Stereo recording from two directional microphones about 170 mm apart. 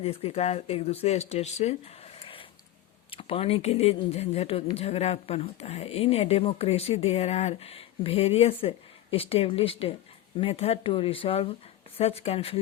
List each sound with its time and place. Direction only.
0.0 s speech: 35° left (ahead or behind)